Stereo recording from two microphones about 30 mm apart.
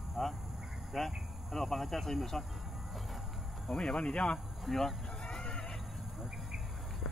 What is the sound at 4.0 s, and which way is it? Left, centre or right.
Speech, left.